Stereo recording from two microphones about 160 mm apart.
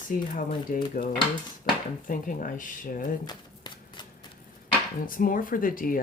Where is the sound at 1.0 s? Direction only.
65° left (ahead or behind).